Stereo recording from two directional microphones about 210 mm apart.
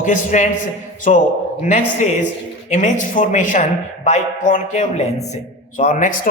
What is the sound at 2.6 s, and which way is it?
A man's voice, 35° left (ahead or behind).